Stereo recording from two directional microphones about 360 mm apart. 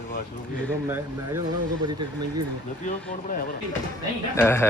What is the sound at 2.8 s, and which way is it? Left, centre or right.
Speech, left.